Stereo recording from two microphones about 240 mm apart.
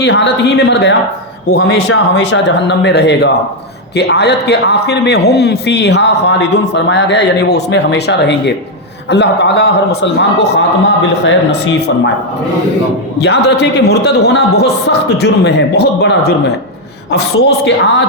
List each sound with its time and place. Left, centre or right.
0.0 s a man's voice: left
13.1 s a man's voice: left
17.7 s a man's voice: left